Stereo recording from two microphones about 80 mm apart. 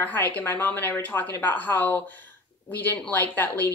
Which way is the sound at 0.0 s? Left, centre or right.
Left.